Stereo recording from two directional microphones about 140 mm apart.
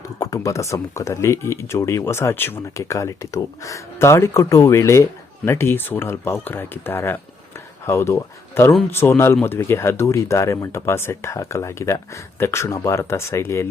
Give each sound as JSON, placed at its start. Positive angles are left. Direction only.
{"t": 0.2, "sound": "speech", "side_deg": 25}